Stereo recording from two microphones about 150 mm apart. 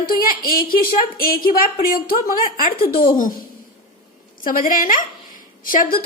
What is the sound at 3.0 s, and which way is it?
Speech, 65° left (ahead or behind).